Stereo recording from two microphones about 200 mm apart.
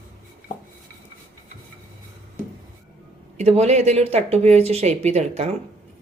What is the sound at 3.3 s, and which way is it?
Speech, 30° right (ahead or behind).